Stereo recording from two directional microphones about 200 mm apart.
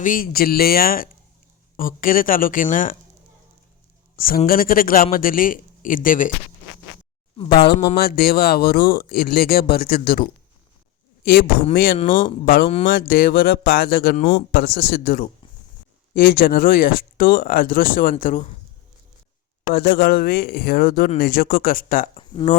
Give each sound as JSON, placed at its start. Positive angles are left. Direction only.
{"t": 0.0, "sound": "speech", "side_deg": 45}
{"t": 4.4, "sound": "speech", "side_deg": 45}
{"t": 7.9, "sound": "speech", "side_deg": 50}
{"t": 11.7, "sound": "speech", "side_deg": 45}
{"t": 11.9, "sound": "speech", "side_deg": 25}
{"t": 12.9, "sound": "speech", "side_deg": 45}
{"t": 14.2, "sound": "speech", "side_deg": 30}
{"t": 14.5, "sound": "speech", "side_deg": 55}
{"t": 19.7, "sound": "speech", "side_deg": 50}
{"t": 22.1, "sound": "speech", "side_deg": 25}